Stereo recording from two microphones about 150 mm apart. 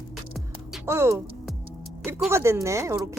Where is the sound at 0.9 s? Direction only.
15° right (ahead or behind).